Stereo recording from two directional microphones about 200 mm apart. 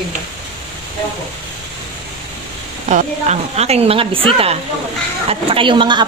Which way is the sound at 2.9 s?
35° right (ahead or behind).